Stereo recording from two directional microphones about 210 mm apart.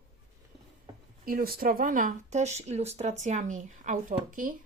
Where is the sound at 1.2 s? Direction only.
45° right (ahead or behind).